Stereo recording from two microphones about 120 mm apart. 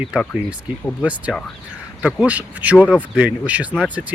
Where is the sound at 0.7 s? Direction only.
15° right (ahead or behind).